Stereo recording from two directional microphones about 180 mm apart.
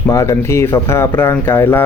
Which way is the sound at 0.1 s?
15° left (ahead or behind).